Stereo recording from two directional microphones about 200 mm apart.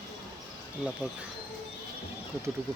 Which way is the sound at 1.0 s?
5° right (ahead or behind).